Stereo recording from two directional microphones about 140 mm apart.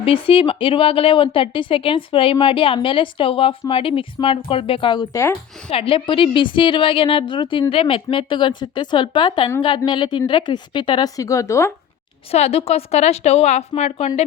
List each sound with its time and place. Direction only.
0.0 s a woman's voice: 40° left (ahead or behind)
5.1 s speech: 20° left (ahead or behind)
5.7 s a woman's voice: 40° left (ahead or behind); by 11.7 s 20° left (ahead or behind)
12.3 s a woman's voice: 45° left (ahead or behind)